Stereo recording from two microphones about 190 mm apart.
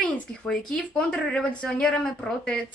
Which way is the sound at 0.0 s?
5° left (ahead or behind).